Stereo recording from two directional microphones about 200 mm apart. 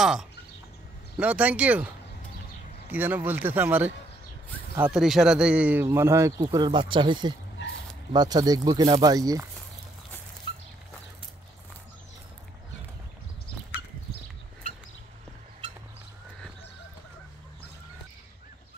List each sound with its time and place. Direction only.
0.0 s speech: centre (ahead or behind)
2.9 s speech: 10° right (ahead or behind)